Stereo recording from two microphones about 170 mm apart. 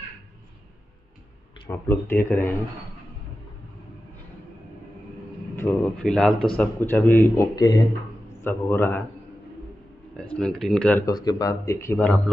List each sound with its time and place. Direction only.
1.7 s a man's voice: 15° left (ahead or behind)
5.6 s a man's voice: 10° left (ahead or behind)
10.3 s speech: 5° left (ahead or behind)
11.1 s a man's voice: 25° left (ahead or behind)